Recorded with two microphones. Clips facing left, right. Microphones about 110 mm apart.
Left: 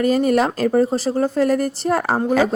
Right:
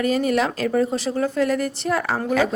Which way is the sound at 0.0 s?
40° left (ahead or behind).